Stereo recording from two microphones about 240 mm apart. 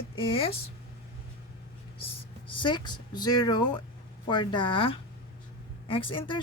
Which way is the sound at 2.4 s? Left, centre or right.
Centre.